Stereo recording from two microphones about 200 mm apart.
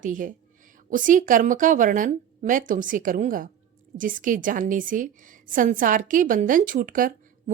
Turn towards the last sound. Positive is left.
turn(degrees=-45)  # may be behind; listen again after turning